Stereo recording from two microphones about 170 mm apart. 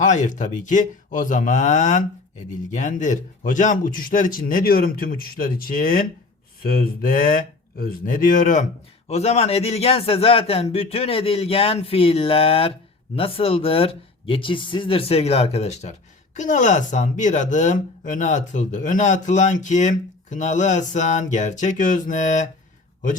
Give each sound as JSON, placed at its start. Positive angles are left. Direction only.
{"t": 0.0, "sound": "speech", "side_deg": 45}
{"t": 6.6, "sound": "mantra", "side_deg": 60}
{"t": 7.8, "sound": "a man's voice", "side_deg": 60}